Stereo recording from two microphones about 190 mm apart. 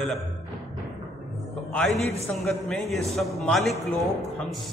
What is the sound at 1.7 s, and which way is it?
A man's voice, 5° left (ahead or behind).